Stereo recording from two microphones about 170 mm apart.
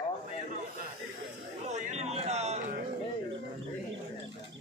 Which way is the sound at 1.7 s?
40° right (ahead or behind).